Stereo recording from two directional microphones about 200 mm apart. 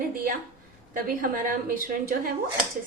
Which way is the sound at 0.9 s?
45° right (ahead or behind).